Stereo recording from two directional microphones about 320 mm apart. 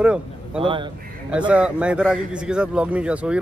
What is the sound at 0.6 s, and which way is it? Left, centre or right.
Speech, centre.